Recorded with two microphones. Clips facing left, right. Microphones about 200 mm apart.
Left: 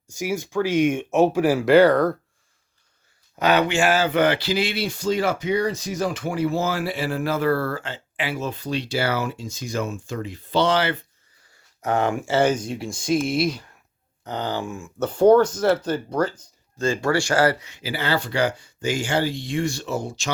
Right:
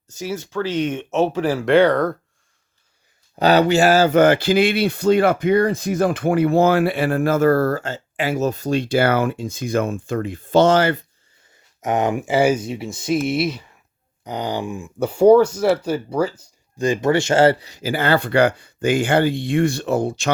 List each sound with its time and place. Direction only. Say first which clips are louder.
0.1 s speech: left 1 dB; 10° left (ahead or behind)
3.3 s speech: right 5 dB; 35° right (ahead or behind)
11.5 s speech: right 2 dB; 20° right (ahead or behind); by 13.7 s centre (ahead or behind)
14.3 s speech: right 3 dB; 15° right (ahead or behind); by 20.3 s 60° right (ahead or behind)